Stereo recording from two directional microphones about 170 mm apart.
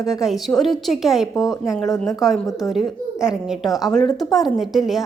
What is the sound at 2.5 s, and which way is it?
Speech, 20° left (ahead or behind).